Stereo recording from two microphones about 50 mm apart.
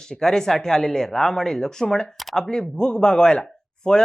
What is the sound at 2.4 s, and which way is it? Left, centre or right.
Speech, centre.